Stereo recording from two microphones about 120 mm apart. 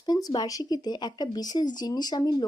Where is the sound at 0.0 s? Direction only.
35° left (ahead or behind).